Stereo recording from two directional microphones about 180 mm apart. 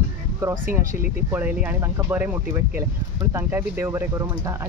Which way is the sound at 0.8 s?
50° right (ahead or behind).